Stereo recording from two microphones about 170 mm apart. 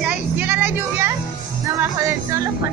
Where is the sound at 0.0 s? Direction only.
10° right (ahead or behind).